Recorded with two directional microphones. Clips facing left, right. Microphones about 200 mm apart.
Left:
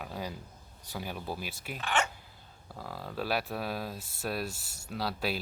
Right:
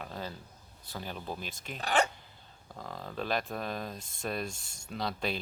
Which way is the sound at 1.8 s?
35° right (ahead or behind).